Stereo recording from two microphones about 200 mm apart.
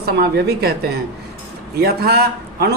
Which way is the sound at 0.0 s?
50° right (ahead or behind).